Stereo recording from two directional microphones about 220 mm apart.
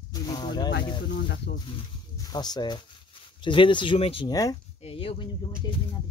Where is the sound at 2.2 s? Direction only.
20° left (ahead or behind).